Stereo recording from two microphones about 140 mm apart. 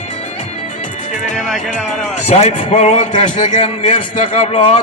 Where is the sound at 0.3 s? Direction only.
65° left (ahead or behind).